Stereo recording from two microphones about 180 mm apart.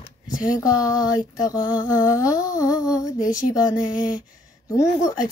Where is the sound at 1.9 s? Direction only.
20° left (ahead or behind).